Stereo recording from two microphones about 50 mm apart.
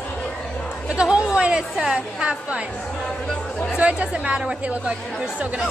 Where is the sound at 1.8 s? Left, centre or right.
Right.